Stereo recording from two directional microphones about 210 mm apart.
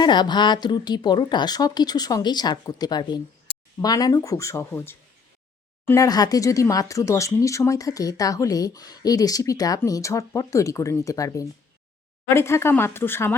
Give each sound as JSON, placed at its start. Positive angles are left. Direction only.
{"t": 0.0, "sound": "speech", "side_deg": 20}